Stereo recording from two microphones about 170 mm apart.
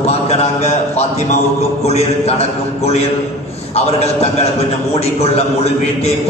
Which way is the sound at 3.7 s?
40° left (ahead or behind).